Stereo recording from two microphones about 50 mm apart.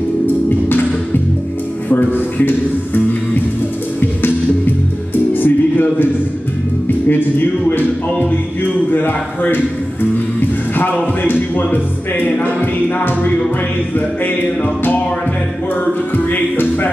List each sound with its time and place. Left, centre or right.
1.9 s music: left
5.3 s music: left
7.1 s a sound: left
8.9 s a man's voice: left
11.2 s music: left
13.9 s music: left
16.3 s music: left